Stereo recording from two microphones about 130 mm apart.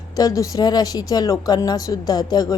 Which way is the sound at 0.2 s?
30° left (ahead or behind).